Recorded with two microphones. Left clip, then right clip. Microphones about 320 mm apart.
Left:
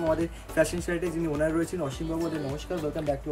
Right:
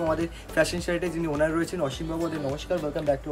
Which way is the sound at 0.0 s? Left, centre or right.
Centre.